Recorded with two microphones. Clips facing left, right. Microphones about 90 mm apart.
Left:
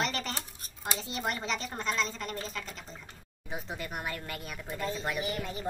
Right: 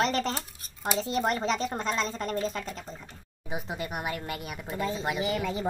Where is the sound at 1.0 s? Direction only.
35° right (ahead or behind).